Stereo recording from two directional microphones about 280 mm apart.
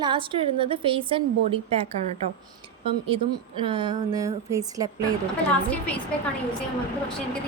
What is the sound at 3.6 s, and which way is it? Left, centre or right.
A woman's voice, centre.